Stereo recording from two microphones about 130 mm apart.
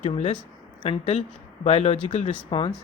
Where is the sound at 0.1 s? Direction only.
45° left (ahead or behind).